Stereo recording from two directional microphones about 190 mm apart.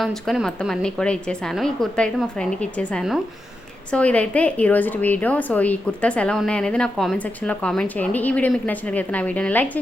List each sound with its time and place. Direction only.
0.0 s a woman's voice: centre (ahead or behind)